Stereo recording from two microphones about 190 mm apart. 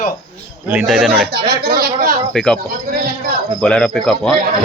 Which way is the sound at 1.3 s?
55° right (ahead or behind).